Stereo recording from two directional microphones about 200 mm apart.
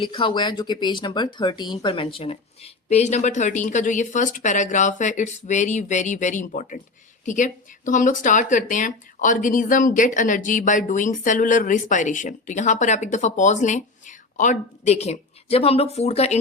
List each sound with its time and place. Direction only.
0.0 s speech: 25° left (ahead or behind)